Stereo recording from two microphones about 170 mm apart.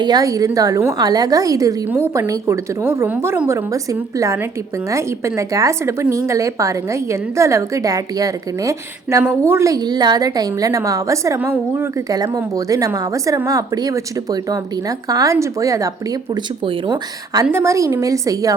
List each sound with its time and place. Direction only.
0.0 s a woman's voice: 20° right (ahead or behind)
16.3 s speech: 30° right (ahead or behind)
17.4 s a woman's voice: 15° right (ahead or behind)